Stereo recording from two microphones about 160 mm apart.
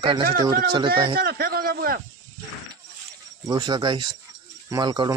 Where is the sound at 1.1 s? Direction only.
75° right (ahead or behind).